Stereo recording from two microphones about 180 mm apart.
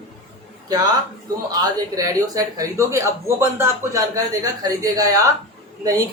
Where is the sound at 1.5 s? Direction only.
20° right (ahead or behind).